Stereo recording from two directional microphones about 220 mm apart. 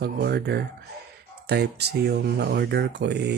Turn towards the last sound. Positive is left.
turn(degrees=-50)  # may be behind; listen again after turning